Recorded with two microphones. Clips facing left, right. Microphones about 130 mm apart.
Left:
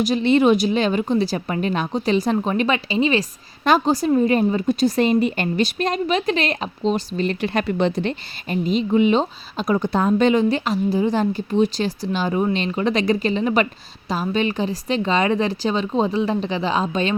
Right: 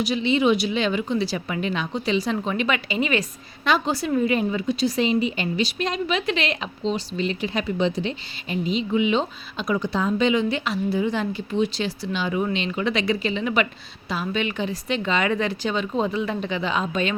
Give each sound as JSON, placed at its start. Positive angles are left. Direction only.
{"t": 0.0, "sound": "speech", "side_deg": 45}